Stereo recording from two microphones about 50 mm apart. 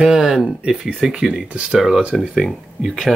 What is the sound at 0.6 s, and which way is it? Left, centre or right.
Speech, right.